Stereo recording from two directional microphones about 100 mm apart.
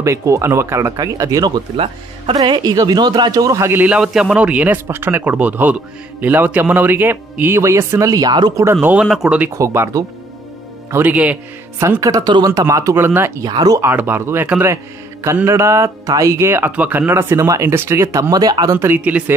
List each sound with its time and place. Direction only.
0.0 s speech: 30° right (ahead or behind)
9.0 s speech: 5° right (ahead or behind)
9.5 s speech: 30° right (ahead or behind)
10.9 s speech: 20° right (ahead or behind)
12.0 s speech: 40° right (ahead or behind)
12.6 s speech: 30° right (ahead or behind)
13.4 s speech: 40° right (ahead or behind)
13.7 s speech: 20° right (ahead or behind); by 18.8 s 40° right (ahead or behind)
18.9 s speech: 15° right (ahead or behind)